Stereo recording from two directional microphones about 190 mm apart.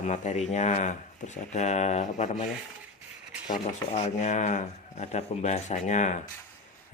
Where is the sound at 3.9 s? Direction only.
35° left (ahead or behind).